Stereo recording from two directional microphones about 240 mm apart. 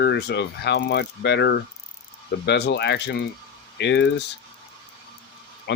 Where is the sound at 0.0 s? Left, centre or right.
Left.